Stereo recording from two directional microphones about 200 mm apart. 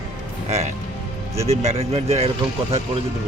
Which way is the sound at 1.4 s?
30° right (ahead or behind).